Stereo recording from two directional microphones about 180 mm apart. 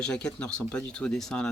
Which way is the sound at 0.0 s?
5° left (ahead or behind).